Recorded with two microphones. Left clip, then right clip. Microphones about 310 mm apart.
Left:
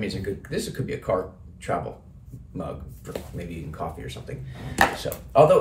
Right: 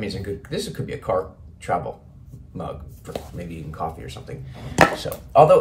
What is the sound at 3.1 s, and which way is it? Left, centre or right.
Speech, centre.